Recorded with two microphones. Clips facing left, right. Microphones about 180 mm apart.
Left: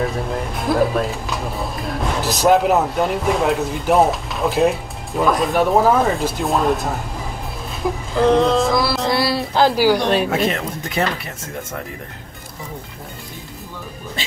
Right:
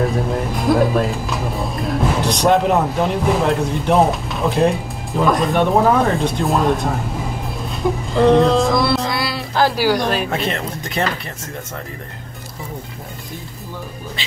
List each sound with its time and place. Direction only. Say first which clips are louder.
0.0 s speech: right 3 dB; centre (ahead or behind)
7.7 s a sound: right 2 dB; centre (ahead or behind)
9.1 s music: left 4 dB; 30° left (ahead or behind)
9.5 s speech: left 1 dB; 15° left (ahead or behind)
10.3 s speech: left 2 dB; centre (ahead or behind)